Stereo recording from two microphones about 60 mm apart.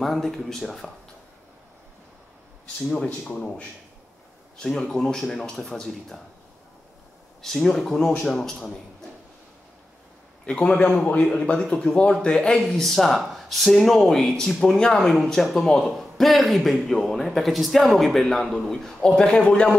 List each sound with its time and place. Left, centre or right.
0.0 s speech: centre
4.6 s speech: centre
7.4 s speech: centre
10.4 s a man's voice: centre